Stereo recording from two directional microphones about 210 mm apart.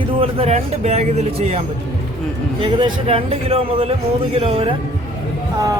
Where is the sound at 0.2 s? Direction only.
30° right (ahead or behind).